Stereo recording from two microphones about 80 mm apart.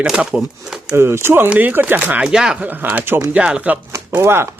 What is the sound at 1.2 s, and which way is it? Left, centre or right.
Speech, right.